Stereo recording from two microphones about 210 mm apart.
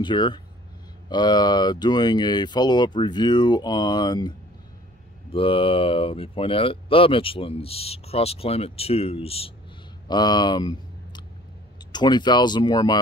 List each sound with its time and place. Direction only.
0.0 s speech: 20° left (ahead or behind)
10.0 s a sound: 20° left (ahead or behind)
11.9 s speech: 20° left (ahead or behind)